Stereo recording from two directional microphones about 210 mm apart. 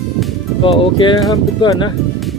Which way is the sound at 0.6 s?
25° left (ahead or behind).